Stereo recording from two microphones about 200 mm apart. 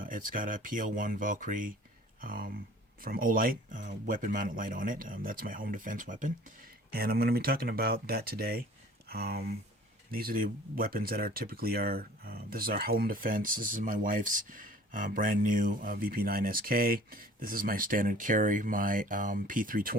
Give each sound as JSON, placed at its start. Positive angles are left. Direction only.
{"t": 0.0, "sound": "speech", "side_deg": -40}